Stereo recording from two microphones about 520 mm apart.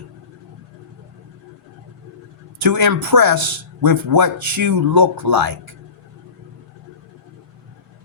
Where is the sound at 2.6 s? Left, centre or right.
Right.